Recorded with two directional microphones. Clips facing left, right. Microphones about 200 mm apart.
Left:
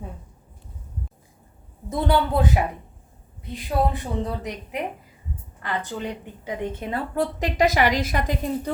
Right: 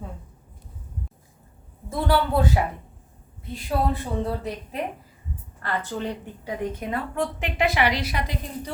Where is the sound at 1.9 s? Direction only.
20° left (ahead or behind).